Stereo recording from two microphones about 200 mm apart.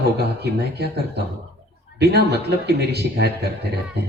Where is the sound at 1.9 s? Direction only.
55° right (ahead or behind).